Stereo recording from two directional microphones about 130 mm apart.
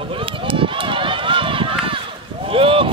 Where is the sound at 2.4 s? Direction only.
45° right (ahead or behind).